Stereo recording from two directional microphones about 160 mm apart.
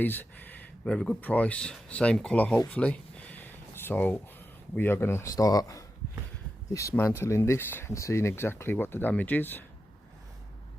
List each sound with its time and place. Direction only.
0.0 s speech: 10° left (ahead or behind)
2.6 s a sound: 10° left (ahead or behind)
4.7 s speech: 15° left (ahead or behind)